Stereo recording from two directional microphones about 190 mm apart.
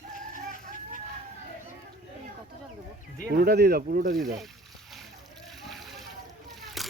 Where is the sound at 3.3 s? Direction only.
55° right (ahead or behind).